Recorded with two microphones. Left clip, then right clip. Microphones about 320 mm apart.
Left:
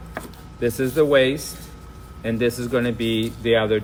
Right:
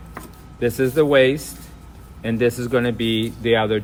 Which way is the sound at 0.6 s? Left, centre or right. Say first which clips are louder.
Right 2 dB; right.